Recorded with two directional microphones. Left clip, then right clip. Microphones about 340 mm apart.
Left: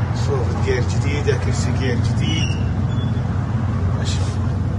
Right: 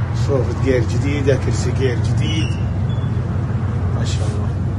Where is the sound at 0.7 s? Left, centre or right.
Centre.